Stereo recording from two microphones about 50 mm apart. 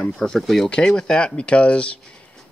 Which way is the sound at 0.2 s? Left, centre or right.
Centre.